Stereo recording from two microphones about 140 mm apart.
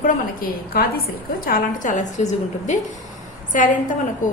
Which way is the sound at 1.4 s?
80° left.